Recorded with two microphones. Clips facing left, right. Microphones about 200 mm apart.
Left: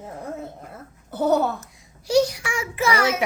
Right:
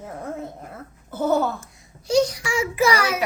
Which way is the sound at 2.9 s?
20° left (ahead or behind).